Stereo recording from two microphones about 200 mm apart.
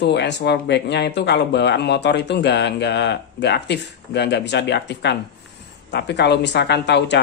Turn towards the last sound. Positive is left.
turn(degrees=60)  # may be behind; listen again after turning